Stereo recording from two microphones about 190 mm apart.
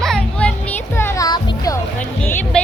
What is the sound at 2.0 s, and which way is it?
Music, 10° left (ahead or behind).